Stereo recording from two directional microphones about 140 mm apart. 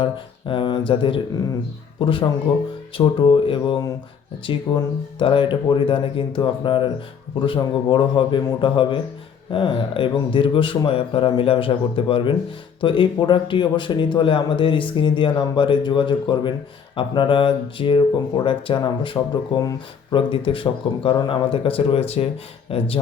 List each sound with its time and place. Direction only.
0.0 s a man's voice: 35° left (ahead or behind)
20.1 s a man's voice: 40° left (ahead or behind)